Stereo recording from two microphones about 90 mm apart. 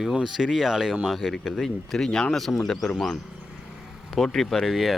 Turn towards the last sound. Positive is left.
turn(degrees=0)  # may be behind; listen again after turning